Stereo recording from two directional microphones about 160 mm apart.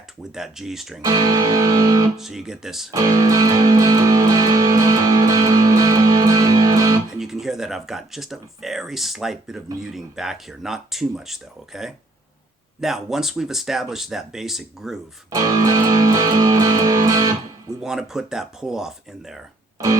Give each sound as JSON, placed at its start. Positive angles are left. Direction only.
{"t": 0.3, "sound": "speech", "side_deg": -5}
{"t": 1.0, "sound": "music", "side_deg": -20}
{"t": 2.1, "sound": "speech", "side_deg": 0}
{"t": 2.9, "sound": "music", "side_deg": -20}
{"t": 7.1, "sound": "speech", "side_deg": 0}
{"t": 15.3, "sound": "music", "side_deg": -20}
{"t": 17.7, "sound": "speech", "side_deg": -5}